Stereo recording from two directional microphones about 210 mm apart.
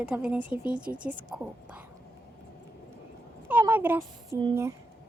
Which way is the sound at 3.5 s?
10° right (ahead or behind).